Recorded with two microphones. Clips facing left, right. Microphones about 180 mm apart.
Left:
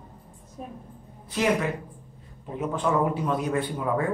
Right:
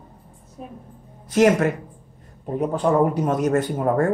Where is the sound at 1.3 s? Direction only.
45° right (ahead or behind).